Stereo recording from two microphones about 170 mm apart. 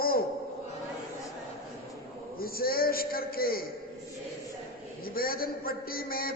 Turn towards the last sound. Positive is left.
turn(degrees=60)  # may be behind; listen again after turning